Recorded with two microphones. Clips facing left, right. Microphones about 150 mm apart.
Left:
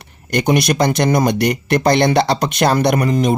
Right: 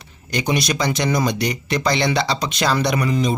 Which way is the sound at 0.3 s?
55° left (ahead or behind).